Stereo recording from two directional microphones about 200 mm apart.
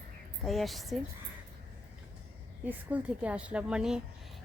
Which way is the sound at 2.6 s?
5° right (ahead or behind).